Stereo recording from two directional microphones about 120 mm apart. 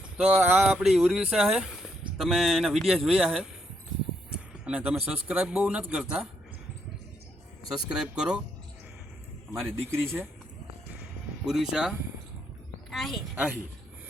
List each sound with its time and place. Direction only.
0.2 s speech: 15° right (ahead or behind)
4.6 s speech: 10° right (ahead or behind)
7.7 s speech: 5° right (ahead or behind)
9.9 s speech: 20° right (ahead or behind)
11.4 s speech: 5° right (ahead or behind)